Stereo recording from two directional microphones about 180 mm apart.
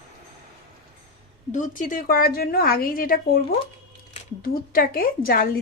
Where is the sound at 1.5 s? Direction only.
45° left (ahead or behind).